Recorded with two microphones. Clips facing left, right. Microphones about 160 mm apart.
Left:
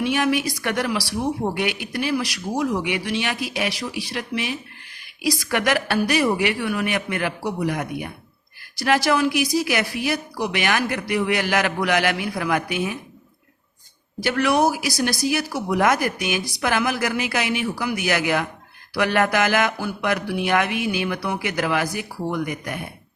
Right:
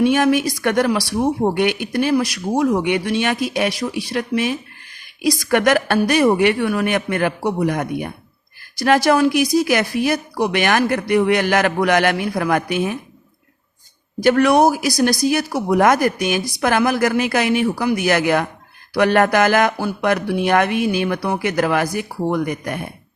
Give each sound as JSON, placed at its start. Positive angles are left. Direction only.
{"t": 0.0, "sound": "speech", "side_deg": -45}
{"t": 14.2, "sound": "speech", "side_deg": -45}